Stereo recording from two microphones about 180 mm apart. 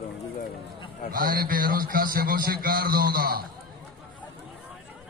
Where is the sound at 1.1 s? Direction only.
50° right (ahead or behind).